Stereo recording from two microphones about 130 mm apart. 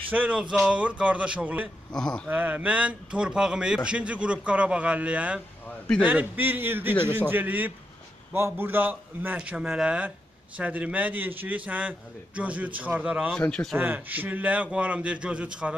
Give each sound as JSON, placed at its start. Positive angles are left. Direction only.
{"t": 0.1, "sound": "a man's voice", "side_deg": -10}
{"t": 1.9, "sound": "speech", "side_deg": 5}
{"t": 2.2, "sound": "a man's voice", "side_deg": -15}
{"t": 13.3, "sound": "speech", "side_deg": 5}
{"t": 13.7, "sound": "a man's voice", "side_deg": -15}